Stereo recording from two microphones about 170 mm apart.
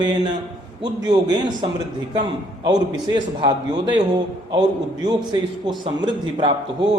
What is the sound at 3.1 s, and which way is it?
A man's voice, 25° right (ahead or behind).